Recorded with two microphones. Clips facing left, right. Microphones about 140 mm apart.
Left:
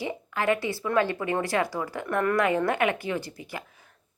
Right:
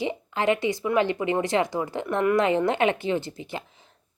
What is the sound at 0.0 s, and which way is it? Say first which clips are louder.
A woman's voice: right 3 dB; 20° right (ahead or behind).